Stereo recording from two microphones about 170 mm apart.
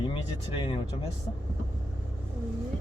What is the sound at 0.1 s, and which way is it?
Speech, 35° left (ahead or behind).